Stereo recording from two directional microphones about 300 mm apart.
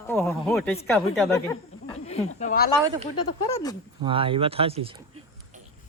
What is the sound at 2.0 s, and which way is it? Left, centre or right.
Speech, left.